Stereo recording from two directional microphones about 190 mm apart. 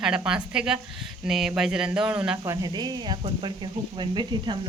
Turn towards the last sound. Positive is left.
turn(degrees=-25)  # may be behind; listen again after turning